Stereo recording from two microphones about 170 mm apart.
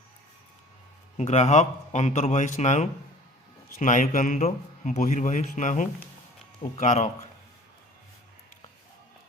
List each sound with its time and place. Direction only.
1.1 s a man's voice: 40° left (ahead or behind)